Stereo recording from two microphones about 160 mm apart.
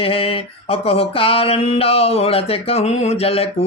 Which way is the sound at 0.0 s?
35° left (ahead or behind).